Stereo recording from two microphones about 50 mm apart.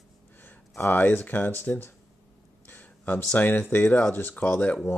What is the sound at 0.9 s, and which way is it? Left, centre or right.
Speech, left.